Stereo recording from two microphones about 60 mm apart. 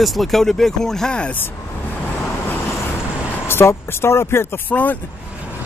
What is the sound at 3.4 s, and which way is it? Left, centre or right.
Speech, left.